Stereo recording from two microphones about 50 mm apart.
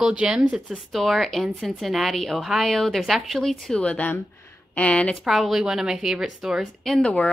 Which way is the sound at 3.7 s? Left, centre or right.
Left.